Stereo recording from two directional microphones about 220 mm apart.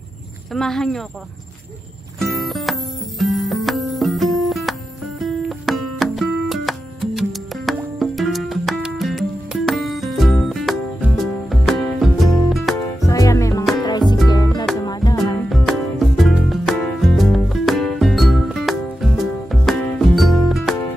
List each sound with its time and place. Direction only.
0.5 s speech: centre (ahead or behind)
2.1 s music: centre (ahead or behind)
13.0 s music: 15° left (ahead or behind)
15.5 s music: centre (ahead or behind)